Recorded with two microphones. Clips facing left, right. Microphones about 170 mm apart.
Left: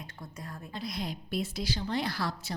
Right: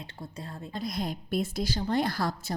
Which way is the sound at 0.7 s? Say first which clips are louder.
Right 4 dB; 45° right (ahead or behind).